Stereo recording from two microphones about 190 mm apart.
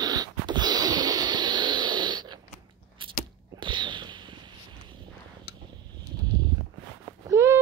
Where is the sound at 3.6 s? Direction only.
25° right (ahead or behind).